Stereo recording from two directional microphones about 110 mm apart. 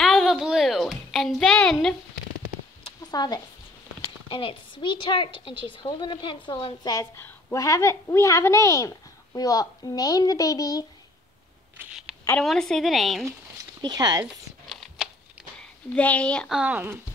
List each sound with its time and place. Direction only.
0.0 s a sound: centre (ahead or behind)
2.8 s a sound: 40° left (ahead or behind)
4.3 s a woman's voice: 50° left (ahead or behind)
7.2 s a woman's voice: 20° left (ahead or behind)
12.4 s a woman's voice: 5° left (ahead or behind)
13.7 s speech: 40° right (ahead or behind)
14.7 s a sound: centre (ahead or behind)
15.9 s speech: 10° left (ahead or behind)
16.4 s a woman's voice: 5° right (ahead or behind)
16.7 s speech: 20° right (ahead or behind)